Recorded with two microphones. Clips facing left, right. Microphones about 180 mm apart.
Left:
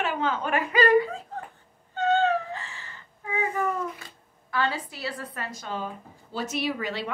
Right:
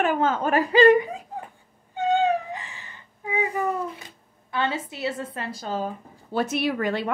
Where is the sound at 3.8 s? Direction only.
25° right (ahead or behind).